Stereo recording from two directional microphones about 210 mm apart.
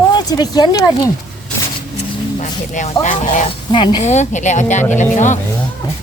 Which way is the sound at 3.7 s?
20° left (ahead or behind).